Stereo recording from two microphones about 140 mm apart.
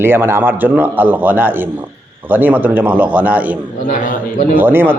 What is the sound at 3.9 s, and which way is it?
Speech, 70° left (ahead or behind).